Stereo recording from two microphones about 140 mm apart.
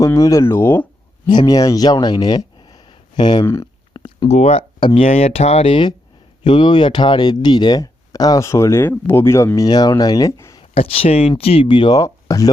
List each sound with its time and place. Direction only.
0.0 s speech: 25° left (ahead or behind)
1.3 s speech: 30° left (ahead or behind)
3.4 s speech: 20° left (ahead or behind)
3.9 s a sound: 35° left (ahead or behind)
4.3 s speech: 50° left (ahead or behind); by 10.6 s 20° left (ahead or behind)
10.6 s speech: 45° left (ahead or behind); by 12.5 s 25° left (ahead or behind)